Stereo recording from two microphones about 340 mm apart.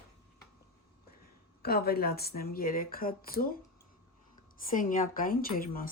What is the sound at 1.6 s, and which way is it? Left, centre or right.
Speech, left.